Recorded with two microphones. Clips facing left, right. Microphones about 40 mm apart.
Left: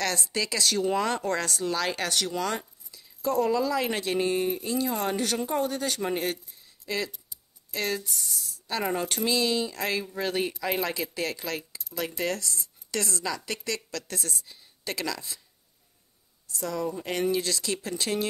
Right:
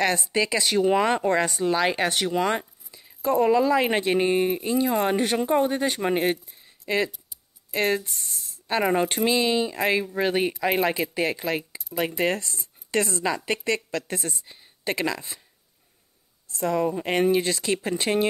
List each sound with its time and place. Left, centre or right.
0.0 s speech: right
16.4 s speech: right